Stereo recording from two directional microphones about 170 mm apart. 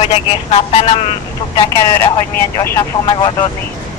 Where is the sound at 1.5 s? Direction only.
20° left (ahead or behind).